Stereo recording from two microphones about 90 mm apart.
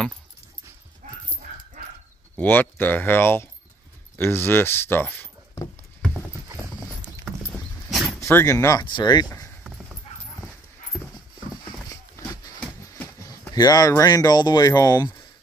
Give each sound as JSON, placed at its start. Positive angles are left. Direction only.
{"t": 2.3, "sound": "speech", "side_deg": 20}
{"t": 7.9, "sound": "dog", "side_deg": 0}
{"t": 8.2, "sound": "speech", "side_deg": 30}
{"t": 8.8, "sound": "speech", "side_deg": 60}
{"t": 11.9, "sound": "a sound", "side_deg": 35}
{"t": 13.5, "sound": "speech", "side_deg": 45}